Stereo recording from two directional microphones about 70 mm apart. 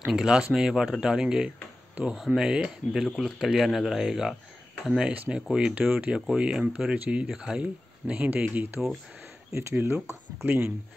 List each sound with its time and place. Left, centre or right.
0.0 s speech: centre; by 8.8 s right
9.5 s speech: right